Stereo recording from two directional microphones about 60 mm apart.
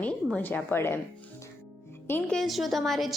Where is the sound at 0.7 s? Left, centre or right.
Left.